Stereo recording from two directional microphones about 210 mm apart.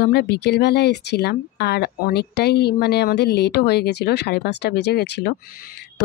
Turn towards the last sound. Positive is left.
turn(degrees=50)  # may be behind; listen again after turning